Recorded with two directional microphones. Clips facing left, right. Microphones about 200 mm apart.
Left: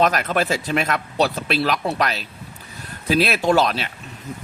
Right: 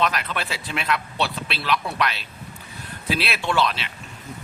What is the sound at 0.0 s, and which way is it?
Speech, 45° left (ahead or behind).